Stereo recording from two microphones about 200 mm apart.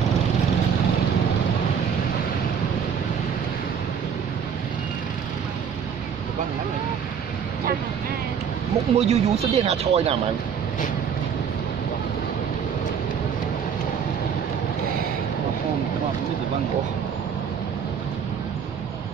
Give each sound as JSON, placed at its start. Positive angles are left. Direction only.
{"t": 8.9, "sound": "speech", "side_deg": -30}